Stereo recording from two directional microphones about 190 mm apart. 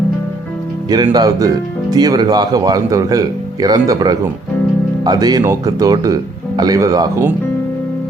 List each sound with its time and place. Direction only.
0.9 s speech: 20° right (ahead or behind)